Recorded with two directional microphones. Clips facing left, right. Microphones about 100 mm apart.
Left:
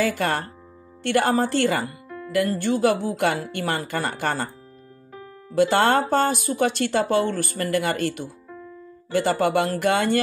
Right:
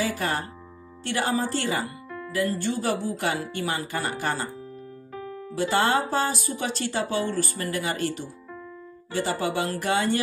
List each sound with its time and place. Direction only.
0.0 s speech: 75° left (ahead or behind)
2.0 s music: 20° left (ahead or behind)
2.3 s speech: 60° left (ahead or behind)
5.6 s speech: 65° left (ahead or behind)